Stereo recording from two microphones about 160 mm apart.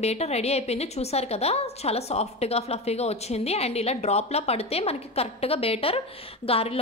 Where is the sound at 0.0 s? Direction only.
40° left (ahead or behind).